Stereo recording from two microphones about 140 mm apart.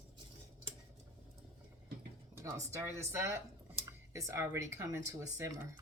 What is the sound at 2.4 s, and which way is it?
Speech, 20° right (ahead or behind).